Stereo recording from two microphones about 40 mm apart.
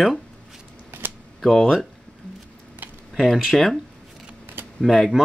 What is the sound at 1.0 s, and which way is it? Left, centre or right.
Camera, right.